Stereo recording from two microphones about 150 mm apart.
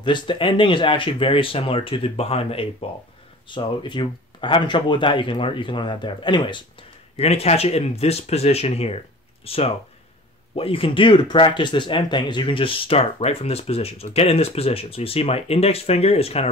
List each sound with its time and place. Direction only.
0.0 s speech: 35° left (ahead or behind)